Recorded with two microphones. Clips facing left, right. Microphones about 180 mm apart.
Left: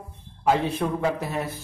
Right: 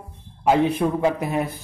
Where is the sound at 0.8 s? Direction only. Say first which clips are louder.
Right 4 dB; 10° right (ahead or behind).